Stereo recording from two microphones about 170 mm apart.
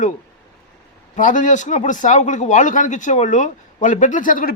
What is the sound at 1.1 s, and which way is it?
Speech, 50° left (ahead or behind).